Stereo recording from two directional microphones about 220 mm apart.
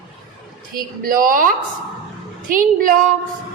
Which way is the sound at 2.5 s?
40° right (ahead or behind).